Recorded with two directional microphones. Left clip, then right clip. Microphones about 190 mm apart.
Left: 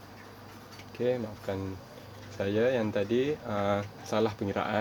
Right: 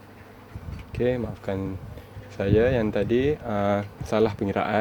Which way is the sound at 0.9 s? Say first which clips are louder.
Right 5 dB; 50° right (ahead or behind).